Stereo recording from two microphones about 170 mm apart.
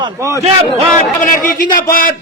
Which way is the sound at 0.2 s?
15° right (ahead or behind).